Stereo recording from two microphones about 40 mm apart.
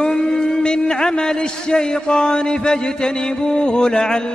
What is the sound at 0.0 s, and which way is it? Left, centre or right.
A man's voice, centre.